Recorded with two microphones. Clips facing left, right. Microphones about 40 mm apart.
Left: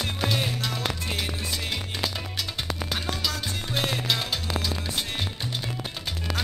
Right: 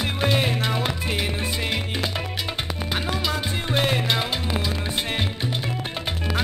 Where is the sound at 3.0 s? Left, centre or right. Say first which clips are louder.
Right 4 dB; right.